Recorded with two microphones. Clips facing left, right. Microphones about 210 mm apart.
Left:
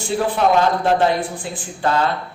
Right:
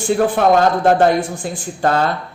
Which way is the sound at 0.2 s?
50° right (ahead or behind).